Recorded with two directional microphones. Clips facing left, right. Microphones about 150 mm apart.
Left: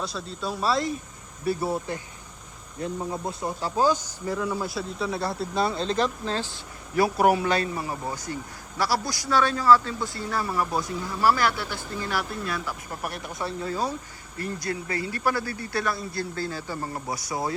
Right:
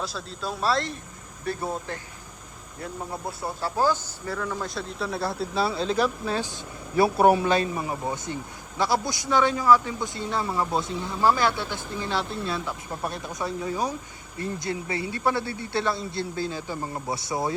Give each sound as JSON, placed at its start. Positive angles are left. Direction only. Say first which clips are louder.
{"t": 0.0, "sound": "speech", "louder": "left 1 dB", "side_deg": 0}
{"t": 3.6, "sound": "speech", "louder": "left 1 dB", "side_deg": 15}
{"t": 7.0, "sound": "a man's voice", "louder": "right 2 dB", "side_deg": -25}